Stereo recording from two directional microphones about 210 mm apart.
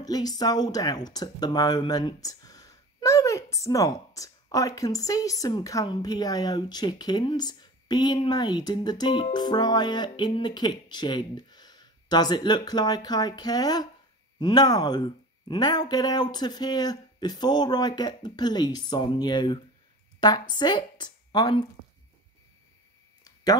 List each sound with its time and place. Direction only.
0.0 s speech: 20° left (ahead or behind)